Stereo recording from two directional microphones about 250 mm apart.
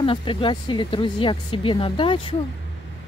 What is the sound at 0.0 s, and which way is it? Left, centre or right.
Speech, left.